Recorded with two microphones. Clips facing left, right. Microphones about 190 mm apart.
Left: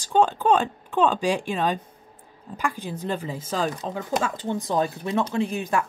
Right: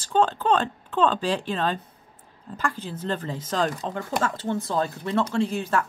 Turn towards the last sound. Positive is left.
turn(degrees=15)  # may be behind; listen again after turning